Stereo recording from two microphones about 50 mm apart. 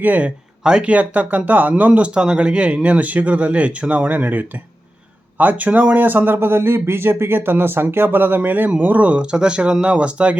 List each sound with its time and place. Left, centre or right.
0.0 s speech: right
0.6 s speech: centre
0.9 s speech: right
1.9 s speech: right
9.2 s speech: centre